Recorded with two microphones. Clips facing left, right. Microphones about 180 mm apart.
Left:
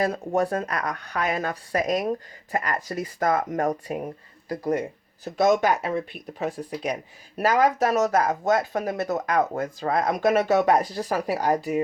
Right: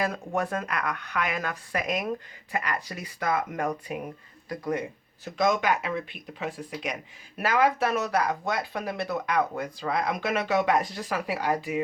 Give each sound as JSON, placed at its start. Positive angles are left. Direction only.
{"t": 0.0, "sound": "speech", "side_deg": 35}